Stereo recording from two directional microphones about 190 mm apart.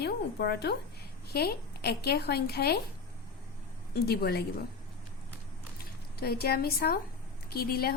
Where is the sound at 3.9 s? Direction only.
55° left (ahead or behind).